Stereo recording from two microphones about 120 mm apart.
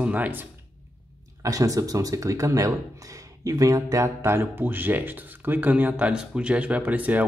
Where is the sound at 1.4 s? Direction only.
30° right (ahead or behind); by 7.3 s 10° right (ahead or behind).